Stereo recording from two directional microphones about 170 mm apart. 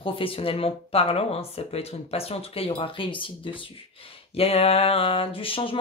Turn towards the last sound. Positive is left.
turn(degrees=30)  # may be behind; listen again after turning